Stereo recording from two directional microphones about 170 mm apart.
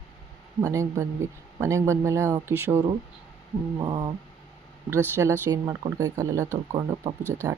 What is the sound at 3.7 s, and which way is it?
Speech, 25° right (ahead or behind).